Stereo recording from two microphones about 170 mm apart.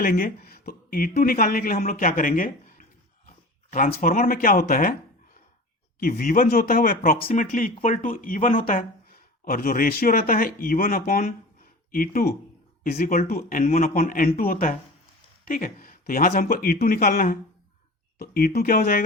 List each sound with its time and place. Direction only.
0.0 s speech: 60° left (ahead or behind)
3.2 s a sound: 55° left (ahead or behind)
4.0 s speech: 55° left (ahead or behind)
6.0 s speech: 55° left (ahead or behind)